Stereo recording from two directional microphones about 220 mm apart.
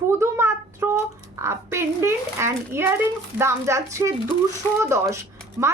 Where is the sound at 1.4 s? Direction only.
10° right (ahead or behind).